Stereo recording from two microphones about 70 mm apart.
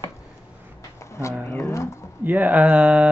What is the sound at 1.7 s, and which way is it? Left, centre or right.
Pigeon, left.